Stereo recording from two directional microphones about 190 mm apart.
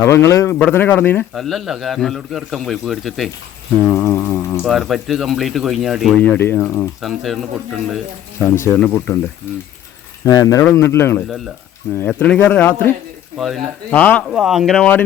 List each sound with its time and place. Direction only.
0.0 s speech: 15° left (ahead or behind)
1.3 s speech: centre (ahead or behind)
3.8 s speech: 15° left (ahead or behind)
4.6 s speech: centre (ahead or behind)
8.6 s speech: 10° left (ahead or behind)
10.2 s speech: 15° left (ahead or behind)
13.9 s speech: 10° left (ahead or behind)
14.3 s speech: centre (ahead or behind)